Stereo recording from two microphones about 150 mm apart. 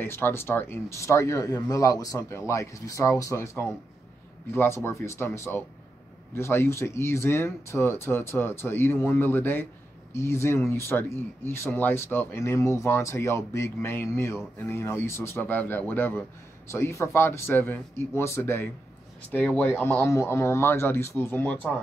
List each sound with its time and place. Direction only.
0.0 s speech: 15° left (ahead or behind)